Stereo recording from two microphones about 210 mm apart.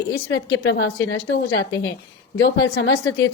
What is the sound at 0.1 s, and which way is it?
A woman's voice, 60° left (ahead or behind).